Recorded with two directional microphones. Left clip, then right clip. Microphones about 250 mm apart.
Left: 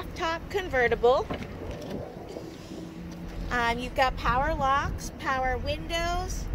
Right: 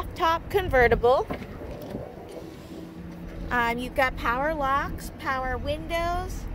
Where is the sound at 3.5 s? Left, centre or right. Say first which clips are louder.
Right 2 dB; centre.